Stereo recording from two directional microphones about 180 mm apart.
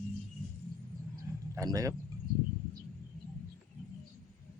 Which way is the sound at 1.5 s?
20° right (ahead or behind).